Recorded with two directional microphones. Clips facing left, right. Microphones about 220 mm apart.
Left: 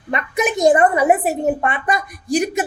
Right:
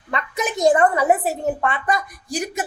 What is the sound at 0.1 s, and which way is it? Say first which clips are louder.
A woman's voice: left 5 dB; 15° left (ahead or behind).